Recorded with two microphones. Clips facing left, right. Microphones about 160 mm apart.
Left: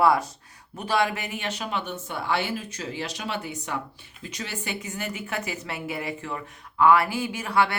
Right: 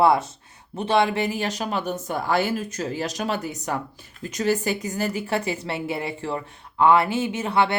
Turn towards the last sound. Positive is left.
turn(degrees=-25)  # may be behind; listen again after turning